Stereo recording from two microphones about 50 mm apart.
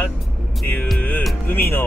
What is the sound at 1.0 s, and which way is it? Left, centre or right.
Speech, left.